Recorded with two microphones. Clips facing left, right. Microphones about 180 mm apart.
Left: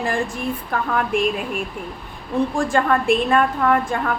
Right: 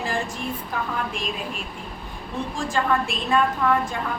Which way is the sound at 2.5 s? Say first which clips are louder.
Left 1 dB; 55° left (ahead or behind).